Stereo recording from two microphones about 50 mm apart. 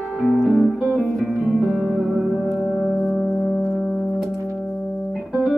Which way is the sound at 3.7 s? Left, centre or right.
Centre.